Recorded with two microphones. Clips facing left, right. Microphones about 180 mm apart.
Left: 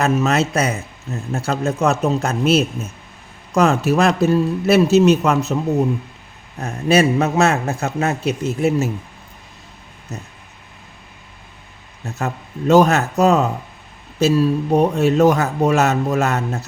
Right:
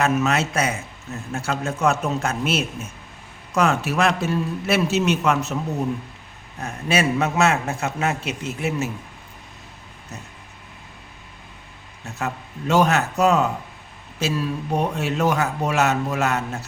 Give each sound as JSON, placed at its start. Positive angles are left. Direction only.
{"t": 0.0, "sound": "a man's voice", "side_deg": 40}
{"t": 6.6, "sound": "a man's voice", "side_deg": 35}
{"t": 12.2, "sound": "a man's voice", "side_deg": 40}